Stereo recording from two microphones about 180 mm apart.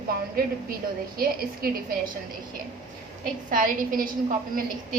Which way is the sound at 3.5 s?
50° right (ahead or behind).